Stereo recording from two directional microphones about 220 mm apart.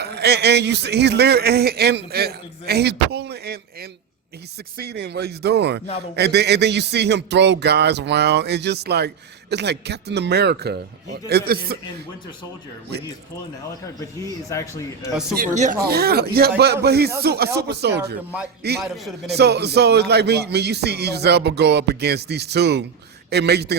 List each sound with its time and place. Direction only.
0.0 s speech: 45° right (ahead or behind)
14.0 s speech: 15° left (ahead or behind)
15.4 s speech: 35° right (ahead or behind)